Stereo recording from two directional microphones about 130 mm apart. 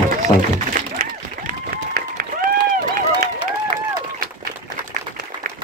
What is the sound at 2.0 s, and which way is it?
Run, 90° right.